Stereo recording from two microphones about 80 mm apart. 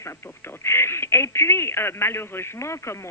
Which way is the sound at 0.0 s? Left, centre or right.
Left.